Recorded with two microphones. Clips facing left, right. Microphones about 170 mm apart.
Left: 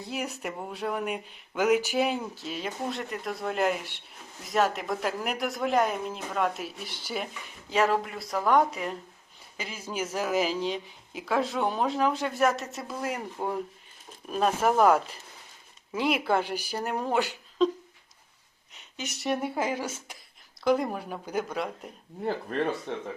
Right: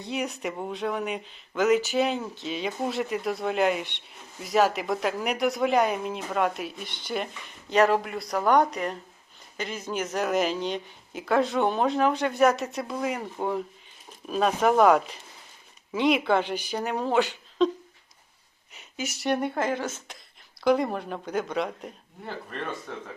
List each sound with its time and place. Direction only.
0.0 s a woman's voice: 5° left (ahead or behind)
18.7 s a woman's voice: 5° right (ahead or behind)
22.9 s speech: 25° left (ahead or behind)